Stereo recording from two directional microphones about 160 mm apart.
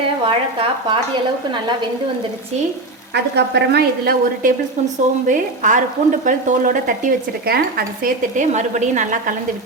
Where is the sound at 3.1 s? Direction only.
90° right.